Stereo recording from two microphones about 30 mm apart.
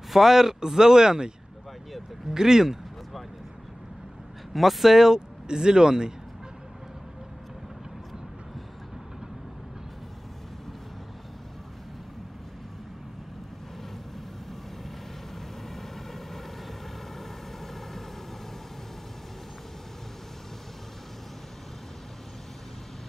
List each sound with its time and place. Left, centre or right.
0.1 s speech: centre
2.3 s speech: centre
4.6 s speech: centre; by 6.1 s right
15.3 s vehicle: centre